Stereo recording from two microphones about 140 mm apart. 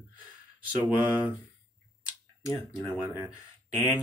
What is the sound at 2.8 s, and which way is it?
Speech, 10° right (ahead or behind).